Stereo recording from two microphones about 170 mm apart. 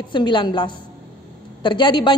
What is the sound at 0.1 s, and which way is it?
A man's voice, 30° left (ahead or behind).